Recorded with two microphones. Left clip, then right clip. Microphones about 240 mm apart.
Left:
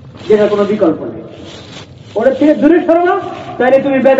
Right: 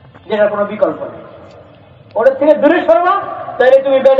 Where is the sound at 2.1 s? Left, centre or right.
Centre.